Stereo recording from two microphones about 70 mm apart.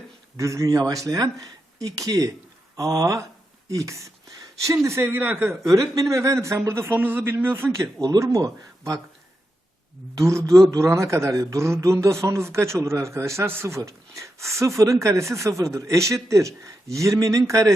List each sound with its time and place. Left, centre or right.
0.3 s speech: right
5.1 s speech: right
5.6 s a man's voice: right
7.7 s speech: right
10.2 s speech: right